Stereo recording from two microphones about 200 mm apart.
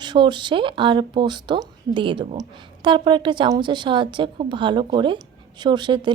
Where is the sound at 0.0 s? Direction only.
20° right (ahead or behind).